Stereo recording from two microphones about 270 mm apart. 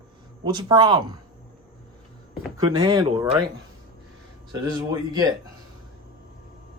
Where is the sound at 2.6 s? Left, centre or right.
Centre.